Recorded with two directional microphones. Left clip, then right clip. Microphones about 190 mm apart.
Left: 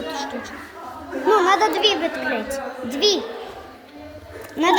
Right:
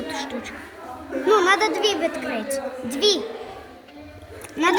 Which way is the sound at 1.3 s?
65° right (ahead or behind).